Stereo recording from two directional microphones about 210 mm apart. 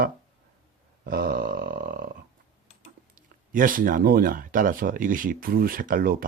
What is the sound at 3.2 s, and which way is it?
Speech, 40° right (ahead or behind).